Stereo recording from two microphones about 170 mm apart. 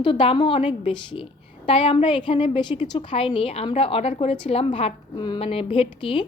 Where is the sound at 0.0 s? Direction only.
30° left (ahead or behind).